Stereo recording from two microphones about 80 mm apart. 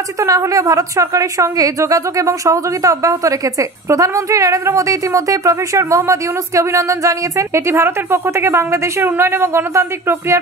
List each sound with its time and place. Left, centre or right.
0.2 s a woman's voice: right
9.0 s a woman's voice: right